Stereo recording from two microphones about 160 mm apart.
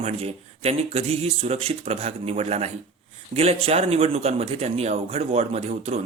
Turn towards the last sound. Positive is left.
turn(degrees=-40)  # may be behind; listen again after turning